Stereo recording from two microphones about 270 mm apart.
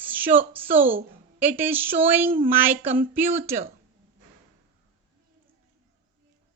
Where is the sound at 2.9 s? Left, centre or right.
Centre.